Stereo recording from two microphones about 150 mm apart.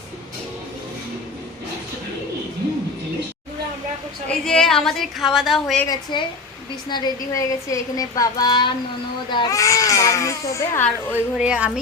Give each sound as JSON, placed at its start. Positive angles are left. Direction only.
{"t": 4.3, "sound": "a woman's voice", "side_deg": 5}
{"t": 5.9, "sound": "a woman's voice", "side_deg": 30}
{"t": 11.1, "sound": "a woman's voice", "side_deg": -10}